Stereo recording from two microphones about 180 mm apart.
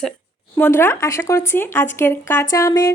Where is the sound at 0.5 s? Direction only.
10° left (ahead or behind).